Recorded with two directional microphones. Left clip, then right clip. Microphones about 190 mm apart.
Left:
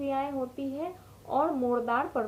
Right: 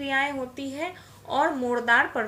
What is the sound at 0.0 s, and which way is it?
Speech, centre (ahead or behind).